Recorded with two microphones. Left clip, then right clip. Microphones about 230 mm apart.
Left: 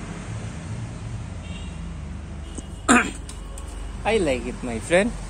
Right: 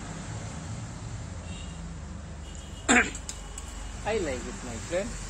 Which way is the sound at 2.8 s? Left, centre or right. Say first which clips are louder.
Left 4 dB; centre.